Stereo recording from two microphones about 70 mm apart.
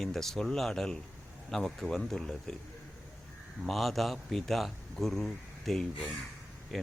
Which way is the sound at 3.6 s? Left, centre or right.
Centre.